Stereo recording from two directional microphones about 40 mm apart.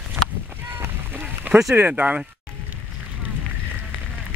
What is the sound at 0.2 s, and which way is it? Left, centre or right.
Run, right.